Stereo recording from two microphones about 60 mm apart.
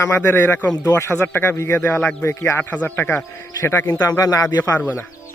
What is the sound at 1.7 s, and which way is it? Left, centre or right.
Speech, left.